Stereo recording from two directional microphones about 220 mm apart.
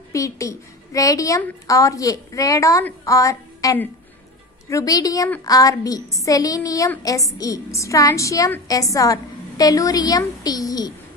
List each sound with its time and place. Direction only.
0.1 s a woman's voice: 15° left (ahead or behind)